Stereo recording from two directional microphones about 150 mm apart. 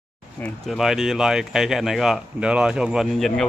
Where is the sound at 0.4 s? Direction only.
Centre (ahead or behind).